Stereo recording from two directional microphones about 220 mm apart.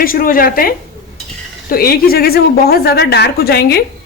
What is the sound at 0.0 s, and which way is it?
A woman's voice, 40° left (ahead or behind).